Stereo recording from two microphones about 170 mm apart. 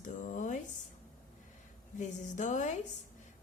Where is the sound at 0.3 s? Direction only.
50° left (ahead or behind).